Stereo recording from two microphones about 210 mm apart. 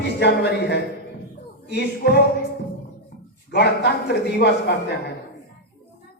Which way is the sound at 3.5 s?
55° left (ahead or behind).